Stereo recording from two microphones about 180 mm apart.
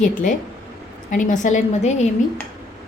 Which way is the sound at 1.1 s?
45° left (ahead or behind).